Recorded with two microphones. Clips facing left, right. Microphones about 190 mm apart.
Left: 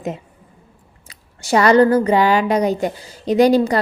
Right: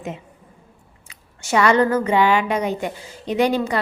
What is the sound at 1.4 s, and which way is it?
A woman's voice, 35° left (ahead or behind).